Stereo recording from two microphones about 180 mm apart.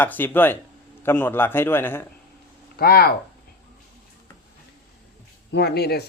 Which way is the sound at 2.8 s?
60° left (ahead or behind).